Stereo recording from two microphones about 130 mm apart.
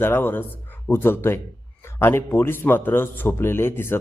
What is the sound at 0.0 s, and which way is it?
A man's voice, 15° left (ahead or behind).